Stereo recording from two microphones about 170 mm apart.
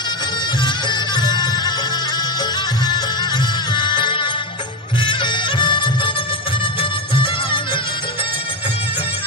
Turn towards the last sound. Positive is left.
turn(degrees=30)  # may be behind; listen again after turning